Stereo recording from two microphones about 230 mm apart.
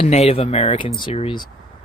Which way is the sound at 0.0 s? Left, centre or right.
Left.